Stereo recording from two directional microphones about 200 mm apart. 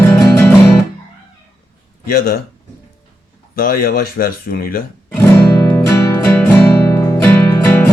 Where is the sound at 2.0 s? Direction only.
50° left (ahead or behind).